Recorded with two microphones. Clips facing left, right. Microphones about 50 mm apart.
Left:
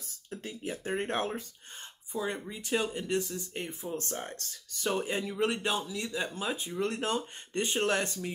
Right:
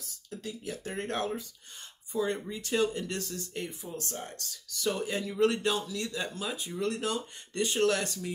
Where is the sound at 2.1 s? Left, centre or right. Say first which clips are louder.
Right 3 dB; centre.